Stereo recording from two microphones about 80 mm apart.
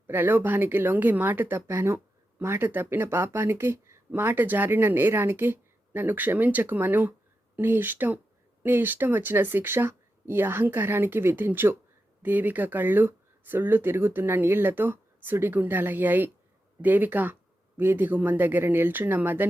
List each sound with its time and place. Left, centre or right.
0.1 s speech: right